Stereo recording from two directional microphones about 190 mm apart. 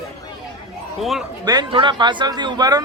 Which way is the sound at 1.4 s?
25° right (ahead or behind).